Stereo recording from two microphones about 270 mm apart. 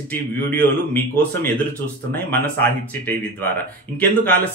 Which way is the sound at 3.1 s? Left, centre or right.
Centre.